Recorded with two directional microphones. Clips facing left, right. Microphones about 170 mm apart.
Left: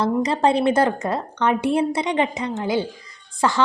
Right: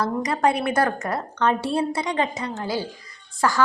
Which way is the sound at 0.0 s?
25° left (ahead or behind).